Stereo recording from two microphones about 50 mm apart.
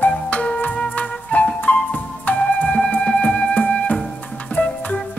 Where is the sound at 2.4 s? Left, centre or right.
Left.